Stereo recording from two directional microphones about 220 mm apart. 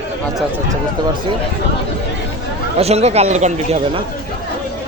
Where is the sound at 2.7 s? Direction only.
30° right (ahead or behind).